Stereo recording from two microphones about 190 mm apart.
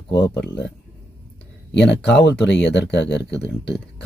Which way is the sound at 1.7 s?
60° left (ahead or behind).